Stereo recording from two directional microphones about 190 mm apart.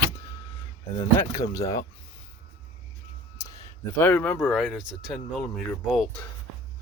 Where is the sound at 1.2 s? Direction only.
15° left (ahead or behind).